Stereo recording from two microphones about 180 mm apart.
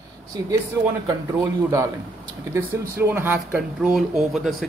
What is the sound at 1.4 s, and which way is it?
Speech, 15° right (ahead or behind).